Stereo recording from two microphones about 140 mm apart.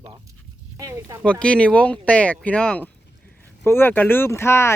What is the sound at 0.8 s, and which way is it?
Speech, 25° right (ahead or behind).